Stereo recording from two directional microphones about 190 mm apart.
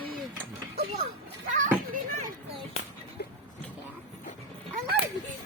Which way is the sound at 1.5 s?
40° right (ahead or behind).